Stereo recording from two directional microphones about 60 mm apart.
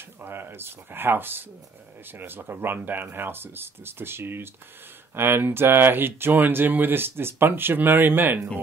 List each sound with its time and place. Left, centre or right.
0.2 s speech: right